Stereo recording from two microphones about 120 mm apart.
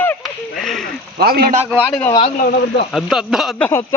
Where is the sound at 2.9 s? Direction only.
5° right (ahead or behind).